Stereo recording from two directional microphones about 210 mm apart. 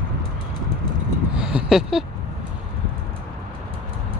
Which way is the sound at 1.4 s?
5° right (ahead or behind).